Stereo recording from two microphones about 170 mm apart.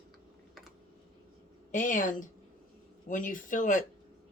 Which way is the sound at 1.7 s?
50° left (ahead or behind).